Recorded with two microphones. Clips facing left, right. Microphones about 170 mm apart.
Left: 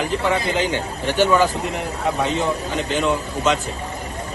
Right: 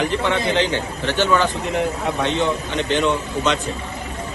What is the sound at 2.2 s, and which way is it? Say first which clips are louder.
A man's voice: right 3 dB; centre (ahead or behind).